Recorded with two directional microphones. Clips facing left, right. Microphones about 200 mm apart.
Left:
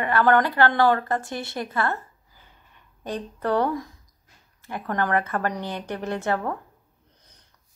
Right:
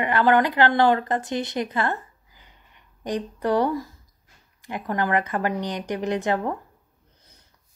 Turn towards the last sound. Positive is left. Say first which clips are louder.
# right 2 dB
turn(degrees=-15)  # may be behind; listen again after turning